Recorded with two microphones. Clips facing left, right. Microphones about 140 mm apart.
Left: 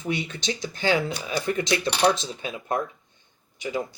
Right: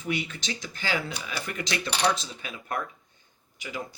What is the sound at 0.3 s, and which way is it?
Speech, 20° left (ahead or behind).